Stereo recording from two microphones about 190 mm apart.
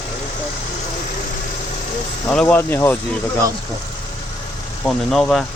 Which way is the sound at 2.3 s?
5° left (ahead or behind).